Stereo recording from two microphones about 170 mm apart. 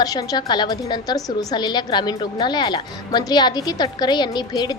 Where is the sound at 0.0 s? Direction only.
20° left (ahead or behind).